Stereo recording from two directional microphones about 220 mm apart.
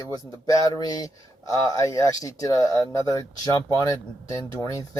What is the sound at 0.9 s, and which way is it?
Speech, 15° left (ahead or behind).